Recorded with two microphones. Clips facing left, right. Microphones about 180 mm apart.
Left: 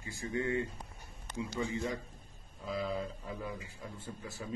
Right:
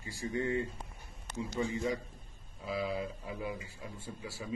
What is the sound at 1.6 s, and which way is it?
Speech, 25° right (ahead or behind).